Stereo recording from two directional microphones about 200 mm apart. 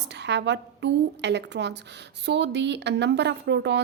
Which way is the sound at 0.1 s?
60° right (ahead or behind).